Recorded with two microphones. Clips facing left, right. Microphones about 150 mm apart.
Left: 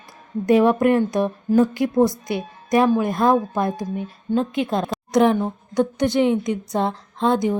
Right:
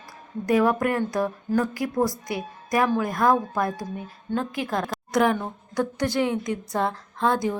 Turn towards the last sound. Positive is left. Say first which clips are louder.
# left 4 dB
turn(degrees=20)  # may be behind; listen again after turning